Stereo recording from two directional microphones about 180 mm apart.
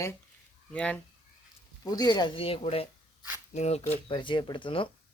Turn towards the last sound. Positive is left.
turn(degrees=30)  # may be behind; listen again after turning